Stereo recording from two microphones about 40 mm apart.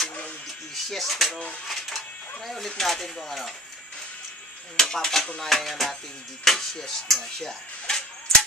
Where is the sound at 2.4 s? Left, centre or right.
Centre.